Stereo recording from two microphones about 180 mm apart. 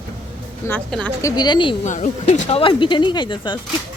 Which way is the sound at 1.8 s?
40° left (ahead or behind).